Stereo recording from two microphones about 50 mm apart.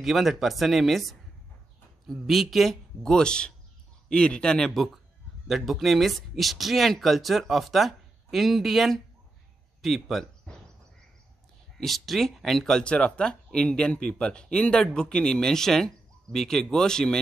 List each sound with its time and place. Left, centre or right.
0.0 s speech: centre
2.2 s speech: centre
3.0 s speech: centre
4.7 s speech: centre
11.8 s speech: centre
12.8 s speech: left